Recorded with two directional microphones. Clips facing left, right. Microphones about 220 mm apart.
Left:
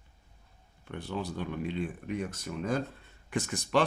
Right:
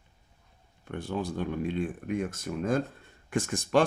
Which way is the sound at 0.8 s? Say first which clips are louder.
Right 3 dB; 45° right (ahead or behind).